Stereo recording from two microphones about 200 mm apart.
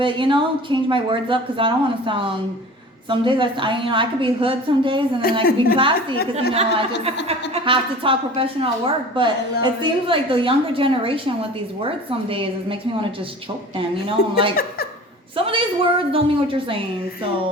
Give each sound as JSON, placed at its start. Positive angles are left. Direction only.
{"t": 0.0, "sound": "a woman's voice", "side_deg": -25}